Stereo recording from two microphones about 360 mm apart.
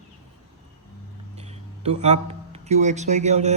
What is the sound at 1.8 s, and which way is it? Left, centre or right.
A man's voice, centre.